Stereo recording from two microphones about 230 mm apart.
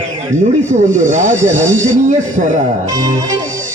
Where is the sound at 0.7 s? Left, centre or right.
Right.